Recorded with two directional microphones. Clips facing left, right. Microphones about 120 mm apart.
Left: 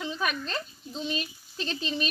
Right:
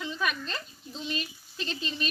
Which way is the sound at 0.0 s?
40° left (ahead or behind).